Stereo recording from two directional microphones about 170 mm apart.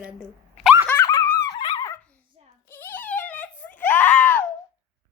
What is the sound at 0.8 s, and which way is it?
Dog, 15° left (ahead or behind).